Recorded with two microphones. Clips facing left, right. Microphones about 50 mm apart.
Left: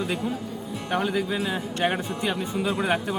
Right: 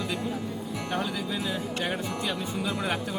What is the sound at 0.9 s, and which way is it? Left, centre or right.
Speech, left.